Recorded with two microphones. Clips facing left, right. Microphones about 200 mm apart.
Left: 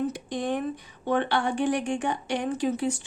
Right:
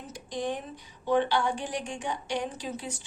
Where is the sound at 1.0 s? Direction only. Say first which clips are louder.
Even; 60° left (ahead or behind).